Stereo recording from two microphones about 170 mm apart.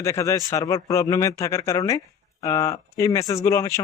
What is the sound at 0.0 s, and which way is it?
A man's voice, 15° left (ahead or behind).